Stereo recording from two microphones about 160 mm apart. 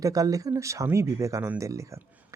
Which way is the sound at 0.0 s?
20° right (ahead or behind).